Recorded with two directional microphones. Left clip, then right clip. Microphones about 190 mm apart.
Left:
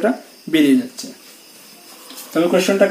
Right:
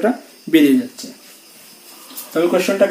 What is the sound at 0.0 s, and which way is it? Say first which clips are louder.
Speech: even; 20° right (ahead or behind).